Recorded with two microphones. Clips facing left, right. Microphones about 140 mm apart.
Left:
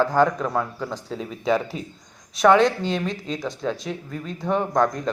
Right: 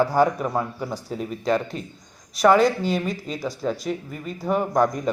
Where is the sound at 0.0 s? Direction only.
10° right (ahead or behind).